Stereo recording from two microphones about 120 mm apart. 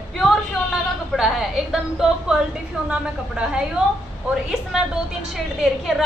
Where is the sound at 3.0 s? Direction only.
5° right (ahead or behind).